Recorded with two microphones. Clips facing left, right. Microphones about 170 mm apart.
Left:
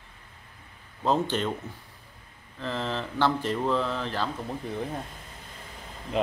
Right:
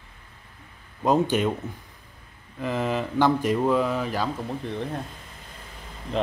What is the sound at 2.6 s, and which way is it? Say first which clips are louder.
Speech: right 5 dB; 15° right (ahead or behind).